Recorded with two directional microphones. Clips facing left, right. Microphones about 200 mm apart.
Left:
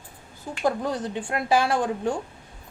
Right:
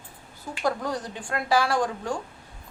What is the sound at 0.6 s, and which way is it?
A woman's voice, 20° left (ahead or behind).